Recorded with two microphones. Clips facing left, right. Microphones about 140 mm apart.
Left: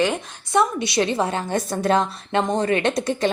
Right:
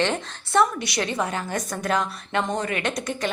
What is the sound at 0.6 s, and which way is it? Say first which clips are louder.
Speech: left 3 dB; 25° left (ahead or behind).